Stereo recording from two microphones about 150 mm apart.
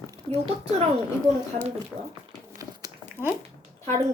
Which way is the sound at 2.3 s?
25° right (ahead or behind).